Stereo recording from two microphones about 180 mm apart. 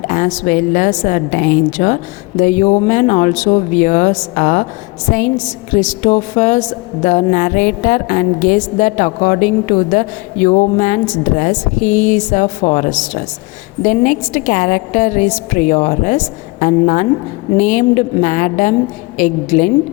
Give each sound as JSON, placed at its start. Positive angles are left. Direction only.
{"t": 0.1, "sound": "a woman's voice", "side_deg": 45}